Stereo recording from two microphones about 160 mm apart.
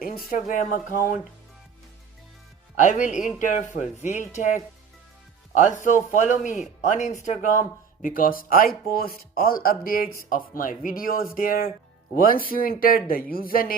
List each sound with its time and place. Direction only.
0.0 s speech: 60° left (ahead or behind)
2.7 s speech: 50° left (ahead or behind)
8.0 s speech: 60° left (ahead or behind)